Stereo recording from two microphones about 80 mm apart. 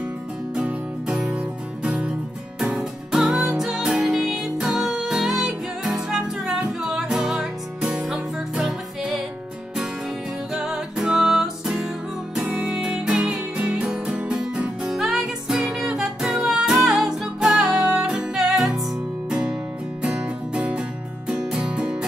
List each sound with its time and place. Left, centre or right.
0.6 s music: centre
10.5 s music: centre